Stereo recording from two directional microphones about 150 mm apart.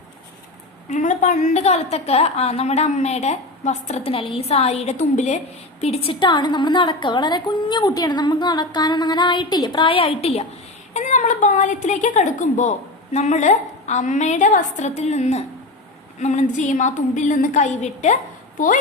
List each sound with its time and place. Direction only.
0.9 s a woman's voice: 55° left (ahead or behind)
10.9 s a woman's voice: 55° left (ahead or behind)